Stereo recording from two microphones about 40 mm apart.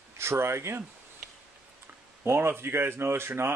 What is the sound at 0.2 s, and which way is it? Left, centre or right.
Speech, right.